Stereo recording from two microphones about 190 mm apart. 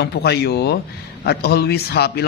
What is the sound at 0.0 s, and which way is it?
Speech, 60° left (ahead or behind).